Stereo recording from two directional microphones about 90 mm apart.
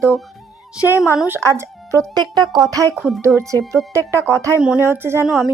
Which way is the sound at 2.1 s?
55° right (ahead or behind).